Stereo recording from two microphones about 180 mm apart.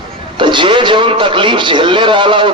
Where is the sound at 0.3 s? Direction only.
25° right (ahead or behind).